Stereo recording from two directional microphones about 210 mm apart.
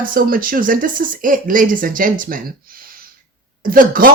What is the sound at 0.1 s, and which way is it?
Speech, 40° right (ahead or behind).